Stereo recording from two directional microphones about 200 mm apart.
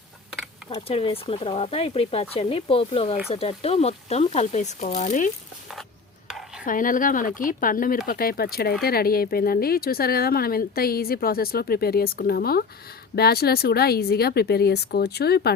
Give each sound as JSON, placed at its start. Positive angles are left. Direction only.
{"t": 0.7, "sound": "speech", "side_deg": 25}
{"t": 6.2, "sound": "dishes", "side_deg": -5}
{"t": 6.7, "sound": "speech", "side_deg": 40}